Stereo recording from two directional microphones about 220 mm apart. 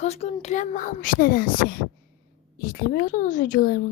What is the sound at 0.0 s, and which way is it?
Speech, 30° left (ahead or behind).